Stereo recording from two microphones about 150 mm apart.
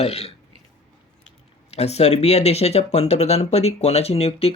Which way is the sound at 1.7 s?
45° left (ahead or behind).